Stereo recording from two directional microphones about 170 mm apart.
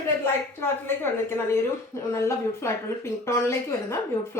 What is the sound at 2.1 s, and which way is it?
Speech, 15° left (ahead or behind).